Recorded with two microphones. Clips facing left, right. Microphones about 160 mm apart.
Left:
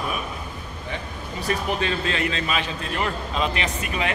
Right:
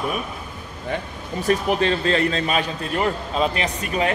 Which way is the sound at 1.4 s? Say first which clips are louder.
Right 5 dB; 40° right (ahead or behind).